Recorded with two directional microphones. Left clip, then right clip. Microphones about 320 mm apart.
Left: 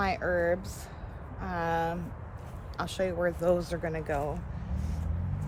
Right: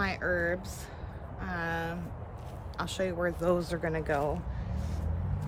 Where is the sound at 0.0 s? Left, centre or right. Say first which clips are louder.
Left 2 dB; centre.